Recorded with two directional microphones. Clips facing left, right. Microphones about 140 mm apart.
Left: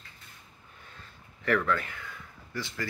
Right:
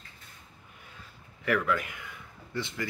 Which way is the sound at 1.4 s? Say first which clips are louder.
Left 1 dB; 10° right (ahead or behind).